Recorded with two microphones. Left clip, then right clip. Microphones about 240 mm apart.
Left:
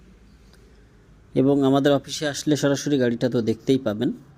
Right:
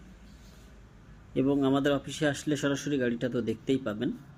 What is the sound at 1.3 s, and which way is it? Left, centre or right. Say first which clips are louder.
Speech: left 8 dB; left.